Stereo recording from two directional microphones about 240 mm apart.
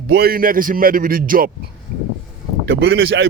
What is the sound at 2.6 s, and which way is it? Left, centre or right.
Speech, right.